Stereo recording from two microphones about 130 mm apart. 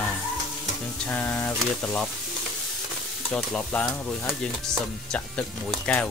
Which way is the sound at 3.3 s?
10° left (ahead or behind).